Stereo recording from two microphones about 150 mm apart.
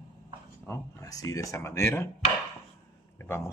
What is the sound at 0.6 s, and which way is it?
Speech, 20° left (ahead or behind).